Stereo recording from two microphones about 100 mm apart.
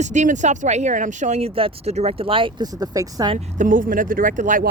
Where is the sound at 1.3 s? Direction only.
90° right; by 2.6 s 60° right (ahead or behind).